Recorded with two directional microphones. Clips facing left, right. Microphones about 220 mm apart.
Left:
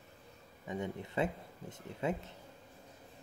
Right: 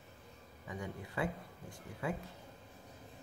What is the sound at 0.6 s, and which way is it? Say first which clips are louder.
Speech: left 5 dB; 25° left (ahead or behind).